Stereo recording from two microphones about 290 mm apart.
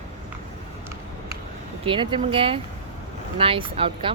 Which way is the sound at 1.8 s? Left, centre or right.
Centre.